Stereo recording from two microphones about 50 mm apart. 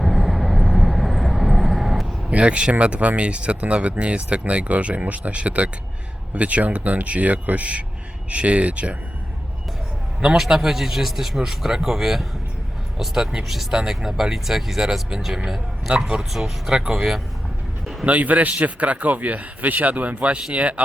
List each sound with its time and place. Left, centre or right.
0.0 s vehicle: centre
0.6 s vehicle: centre
0.9 s vehicle: centre
2.3 s speech: right
10.3 s speech: centre
15.9 s speech: centre
18.0 s speech: right